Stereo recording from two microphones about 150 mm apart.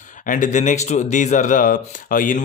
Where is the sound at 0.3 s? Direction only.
55° left (ahead or behind).